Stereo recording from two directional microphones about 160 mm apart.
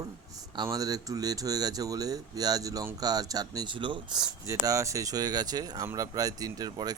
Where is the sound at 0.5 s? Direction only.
25° right (ahead or behind).